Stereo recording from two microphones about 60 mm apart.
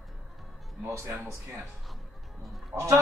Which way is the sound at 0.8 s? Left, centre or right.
Right.